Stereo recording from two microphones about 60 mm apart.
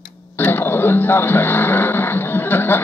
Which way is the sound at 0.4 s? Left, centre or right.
Left.